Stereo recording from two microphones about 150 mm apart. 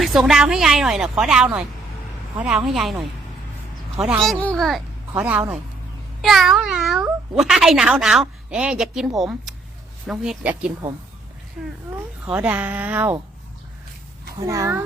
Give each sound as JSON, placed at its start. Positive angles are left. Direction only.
{"t": 0.0, "sound": "a child's voice", "side_deg": 0}
{"t": 2.6, "sound": "a child's voice", "side_deg": -5}
{"t": 4.2, "sound": "a child's voice", "side_deg": 5}
{"t": 12.2, "sound": "a woman's voice", "side_deg": -10}
{"t": 14.3, "sound": "speech", "side_deg": -20}